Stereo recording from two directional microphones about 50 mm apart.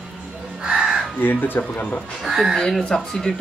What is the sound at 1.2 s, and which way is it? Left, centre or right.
Speech, left.